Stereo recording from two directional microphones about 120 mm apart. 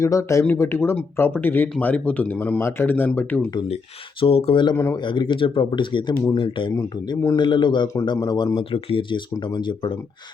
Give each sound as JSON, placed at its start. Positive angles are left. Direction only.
{"t": 0.0, "sound": "speech", "side_deg": 25}
{"t": 4.2, "sound": "speech", "side_deg": 55}
{"t": 4.9, "sound": "speech", "side_deg": 45}